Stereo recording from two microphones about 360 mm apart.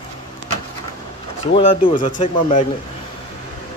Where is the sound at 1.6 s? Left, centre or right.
Centre.